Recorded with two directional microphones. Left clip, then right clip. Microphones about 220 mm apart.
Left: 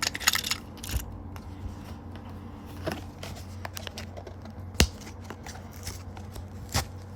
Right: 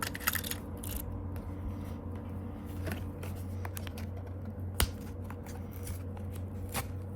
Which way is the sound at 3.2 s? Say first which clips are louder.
Left 4 dB; 45° left (ahead or behind).